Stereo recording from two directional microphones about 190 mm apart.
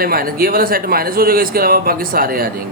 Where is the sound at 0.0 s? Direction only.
50° right (ahead or behind).